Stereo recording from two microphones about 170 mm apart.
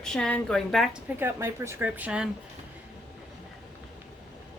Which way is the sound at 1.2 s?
15° right (ahead or behind).